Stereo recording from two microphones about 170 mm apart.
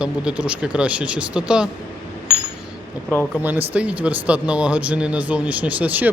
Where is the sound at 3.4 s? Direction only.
10° right (ahead or behind).